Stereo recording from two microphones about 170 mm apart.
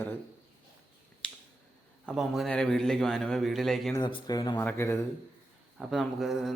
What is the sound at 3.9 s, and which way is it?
Speech, 25° left (ahead or behind).